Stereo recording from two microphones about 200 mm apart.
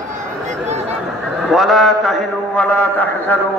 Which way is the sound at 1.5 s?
Centre (ahead or behind).